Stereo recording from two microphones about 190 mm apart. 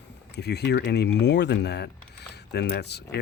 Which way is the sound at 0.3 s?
60° left (ahead or behind).